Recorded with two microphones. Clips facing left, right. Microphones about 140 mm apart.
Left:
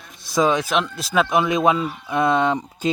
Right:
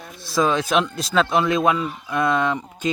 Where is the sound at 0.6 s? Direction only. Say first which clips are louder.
Right 2 dB; 5° left (ahead or behind).